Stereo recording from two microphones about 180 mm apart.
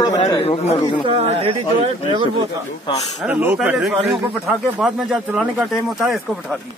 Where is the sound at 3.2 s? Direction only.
10° right (ahead or behind).